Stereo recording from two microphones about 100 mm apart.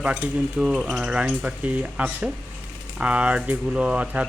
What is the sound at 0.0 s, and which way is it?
Speech, 15° right (ahead or behind).